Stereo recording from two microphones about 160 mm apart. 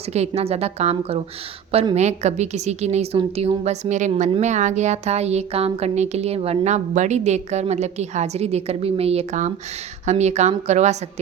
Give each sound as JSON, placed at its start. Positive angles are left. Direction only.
{"t": 0.1, "sound": "a woman's voice", "side_deg": -40}
{"t": 1.7, "sound": "a woman's voice", "side_deg": -30}
{"t": 2.0, "sound": "speech", "side_deg": -45}